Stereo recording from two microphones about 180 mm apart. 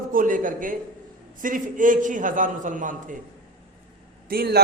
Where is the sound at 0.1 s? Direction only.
50° right (ahead or behind).